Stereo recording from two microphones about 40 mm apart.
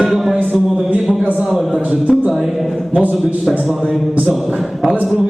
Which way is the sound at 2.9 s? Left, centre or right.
Right.